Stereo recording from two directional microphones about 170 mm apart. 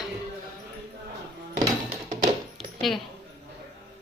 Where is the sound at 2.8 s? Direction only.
Centre (ahead or behind).